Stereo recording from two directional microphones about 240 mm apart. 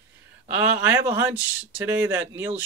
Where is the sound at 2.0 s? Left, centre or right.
Centre.